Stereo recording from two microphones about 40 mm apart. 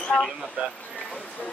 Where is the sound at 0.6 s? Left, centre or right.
Right.